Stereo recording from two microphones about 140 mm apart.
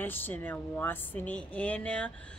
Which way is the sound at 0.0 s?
15° left (ahead or behind).